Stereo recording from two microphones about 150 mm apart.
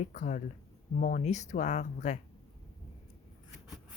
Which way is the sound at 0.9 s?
60° left (ahead or behind).